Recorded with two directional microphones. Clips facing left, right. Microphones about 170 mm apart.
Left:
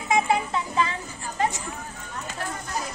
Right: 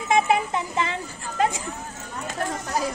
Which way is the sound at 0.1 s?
20° right (ahead or behind).